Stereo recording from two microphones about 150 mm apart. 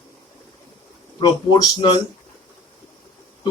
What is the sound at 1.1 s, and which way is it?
Speech, 30° left (ahead or behind).